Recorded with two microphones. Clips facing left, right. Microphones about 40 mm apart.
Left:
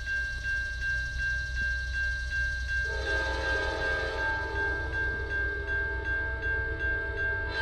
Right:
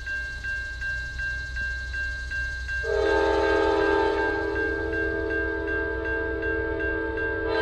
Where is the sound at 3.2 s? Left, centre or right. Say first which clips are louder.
Right 9 dB; right.